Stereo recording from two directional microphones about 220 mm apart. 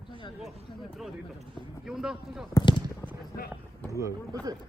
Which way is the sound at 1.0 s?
Centre (ahead or behind).